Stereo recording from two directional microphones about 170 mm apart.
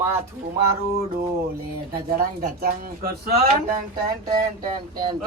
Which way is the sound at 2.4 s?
60° right (ahead or behind).